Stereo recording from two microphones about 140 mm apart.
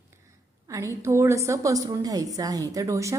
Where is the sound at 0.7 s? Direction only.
20° right (ahead or behind).